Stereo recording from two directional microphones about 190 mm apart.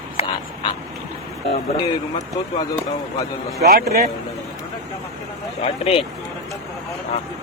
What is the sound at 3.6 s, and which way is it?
Speech, 55° right (ahead or behind).